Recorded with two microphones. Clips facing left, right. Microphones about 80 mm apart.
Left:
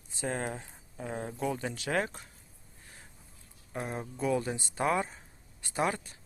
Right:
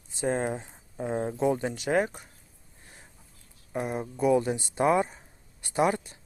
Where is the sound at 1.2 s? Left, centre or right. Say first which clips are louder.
Right 7 dB; right.